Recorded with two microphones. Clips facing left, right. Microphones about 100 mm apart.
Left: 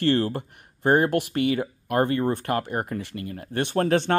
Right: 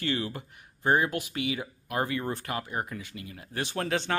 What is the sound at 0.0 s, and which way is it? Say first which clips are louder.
Speech: left 9 dB; 55° left (ahead or behind).